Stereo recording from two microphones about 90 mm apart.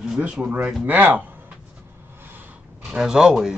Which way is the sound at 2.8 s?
5° right (ahead or behind).